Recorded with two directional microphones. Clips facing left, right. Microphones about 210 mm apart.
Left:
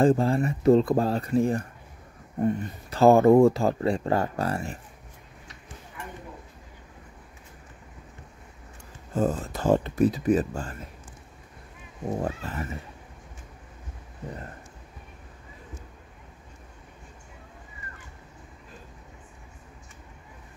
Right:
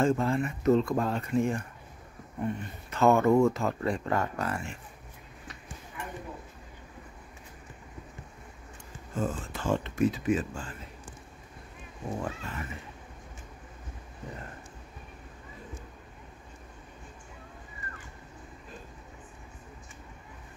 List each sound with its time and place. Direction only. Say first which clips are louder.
0.0 s speech: left 5 dB; 35° left (ahead or behind)
9.1 s speech: left 6 dB; 40° left (ahead or behind)
12.2 s speech: left 5 dB; 40° left (ahead or behind)